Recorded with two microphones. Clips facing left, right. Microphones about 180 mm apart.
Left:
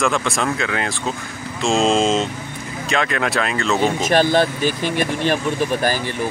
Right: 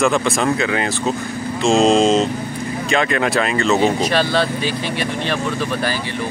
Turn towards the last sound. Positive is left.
turn(degrees=45)  # may be behind; listen again after turning